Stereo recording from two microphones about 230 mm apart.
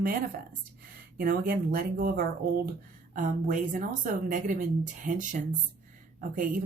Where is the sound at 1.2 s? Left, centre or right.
Right.